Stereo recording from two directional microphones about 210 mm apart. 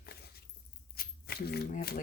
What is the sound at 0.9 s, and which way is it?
Shuffling cards, 45° left (ahead or behind).